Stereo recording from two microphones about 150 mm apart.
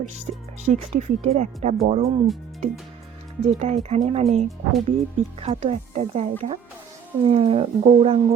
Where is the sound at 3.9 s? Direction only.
50° right (ahead or behind).